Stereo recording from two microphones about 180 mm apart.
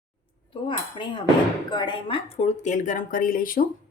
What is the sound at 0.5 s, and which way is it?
Cutlery, 30° left (ahead or behind).